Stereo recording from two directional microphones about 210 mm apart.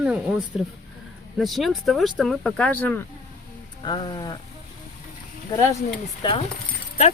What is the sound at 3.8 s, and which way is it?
Speech, 20° left (ahead or behind).